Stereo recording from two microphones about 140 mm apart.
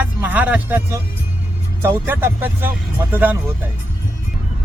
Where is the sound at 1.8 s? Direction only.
15° right (ahead or behind).